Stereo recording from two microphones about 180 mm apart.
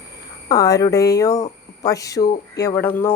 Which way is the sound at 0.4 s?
20° left (ahead or behind).